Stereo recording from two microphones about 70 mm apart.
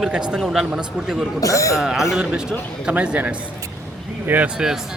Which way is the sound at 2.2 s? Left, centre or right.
Centre.